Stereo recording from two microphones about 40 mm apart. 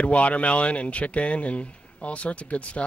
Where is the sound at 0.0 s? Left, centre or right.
Left.